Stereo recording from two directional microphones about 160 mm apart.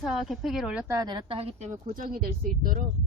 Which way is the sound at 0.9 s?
25° right (ahead or behind).